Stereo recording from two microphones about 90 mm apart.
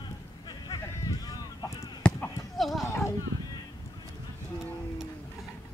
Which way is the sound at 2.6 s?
Centre (ahead or behind).